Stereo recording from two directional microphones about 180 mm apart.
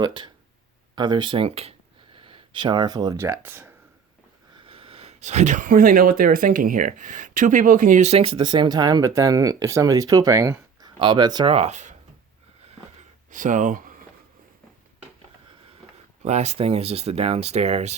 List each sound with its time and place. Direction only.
0.0 s speech: 25° right (ahead or behind)
4.5 s speech: 30° right (ahead or behind)
11.5 s speech: 40° right (ahead or behind)
13.3 s speech: 45° right (ahead or behind)
16.2 s speech: 35° right (ahead or behind)